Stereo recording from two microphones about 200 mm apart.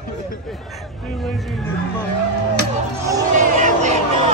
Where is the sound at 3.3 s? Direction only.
40° right (ahead or behind).